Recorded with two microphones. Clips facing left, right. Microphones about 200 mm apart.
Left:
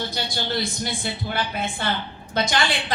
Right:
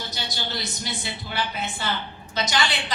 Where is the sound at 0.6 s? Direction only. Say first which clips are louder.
Left 5 dB; 50° left (ahead or behind).